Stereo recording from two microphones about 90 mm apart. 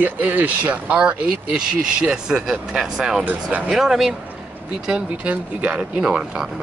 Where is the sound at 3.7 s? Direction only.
5° right (ahead or behind).